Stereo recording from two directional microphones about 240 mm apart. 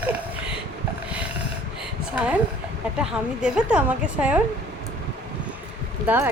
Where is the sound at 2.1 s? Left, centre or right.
Centre.